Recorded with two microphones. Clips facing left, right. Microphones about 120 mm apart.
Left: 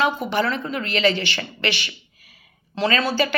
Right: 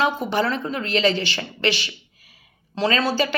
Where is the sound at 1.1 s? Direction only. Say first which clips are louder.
Right 1 dB; 40° right (ahead or behind).